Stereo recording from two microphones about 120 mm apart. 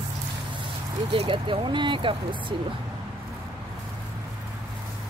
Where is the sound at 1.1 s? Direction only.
45° right (ahead or behind).